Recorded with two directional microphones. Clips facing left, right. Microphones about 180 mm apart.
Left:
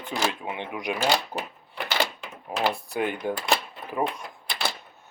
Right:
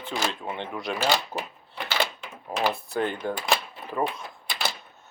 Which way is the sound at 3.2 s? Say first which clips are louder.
Left 1 dB; 15° left (ahead or behind).